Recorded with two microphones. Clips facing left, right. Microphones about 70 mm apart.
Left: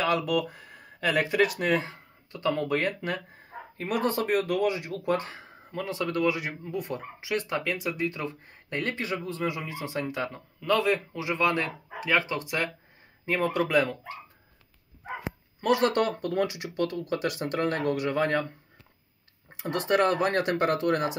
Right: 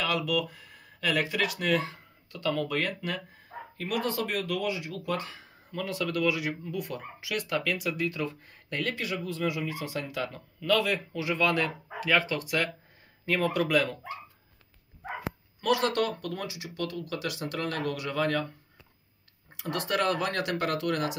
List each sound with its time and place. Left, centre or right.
0.0 s speech: left
5.8 s speech: left
15.6 s speech: left
17.6 s speech: left
19.6 s speech: left